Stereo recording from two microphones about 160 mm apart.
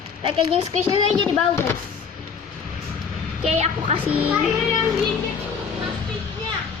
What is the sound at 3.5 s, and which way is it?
Speech, 40° right (ahead or behind).